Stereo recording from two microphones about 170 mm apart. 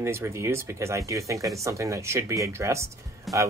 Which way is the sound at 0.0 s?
15° right (ahead or behind).